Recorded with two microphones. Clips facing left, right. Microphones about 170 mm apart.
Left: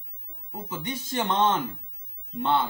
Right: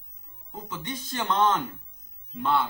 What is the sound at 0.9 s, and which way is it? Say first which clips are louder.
Speech: left 2 dB; 25° left (ahead or behind).